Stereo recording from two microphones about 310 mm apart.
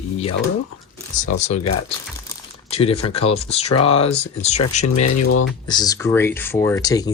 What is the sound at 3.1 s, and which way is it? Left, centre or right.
Speech, centre.